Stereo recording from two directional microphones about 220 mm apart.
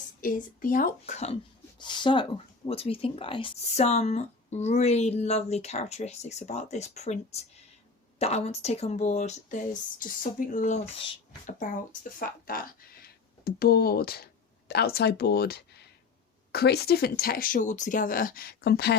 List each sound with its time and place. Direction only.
0.2 s speech: 40° left (ahead or behind)